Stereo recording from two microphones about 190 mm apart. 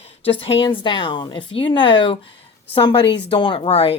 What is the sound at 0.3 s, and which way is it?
A woman's voice, 30° left (ahead or behind).